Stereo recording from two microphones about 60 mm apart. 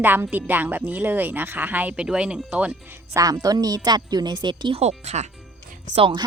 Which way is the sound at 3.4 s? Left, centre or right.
Right.